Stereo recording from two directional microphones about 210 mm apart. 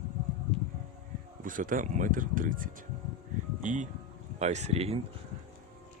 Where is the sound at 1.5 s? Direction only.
40° right (ahead or behind).